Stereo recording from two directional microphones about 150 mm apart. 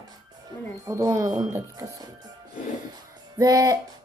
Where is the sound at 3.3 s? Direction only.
25° right (ahead or behind).